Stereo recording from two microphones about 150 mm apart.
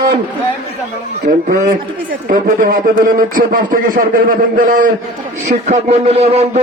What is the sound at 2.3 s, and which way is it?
Speech, 65° right (ahead or behind).